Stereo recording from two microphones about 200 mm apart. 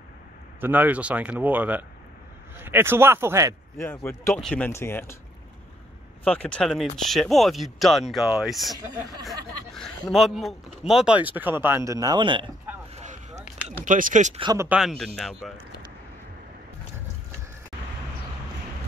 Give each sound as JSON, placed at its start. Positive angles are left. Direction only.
{"t": 0.6, "sound": "speech", "side_deg": -10}
{"t": 3.7, "sound": "speech", "side_deg": 10}
{"t": 6.2, "sound": "speech", "side_deg": 5}
{"t": 10.1, "sound": "speech", "side_deg": 0}
{"t": 12.9, "sound": "a sound", "side_deg": -35}
{"t": 13.7, "sound": "speech", "side_deg": -40}
{"t": 14.4, "sound": "speech", "side_deg": -20}
{"t": 14.7, "sound": "speech", "side_deg": 0}